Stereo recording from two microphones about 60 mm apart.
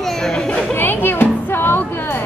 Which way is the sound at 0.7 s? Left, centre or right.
Left.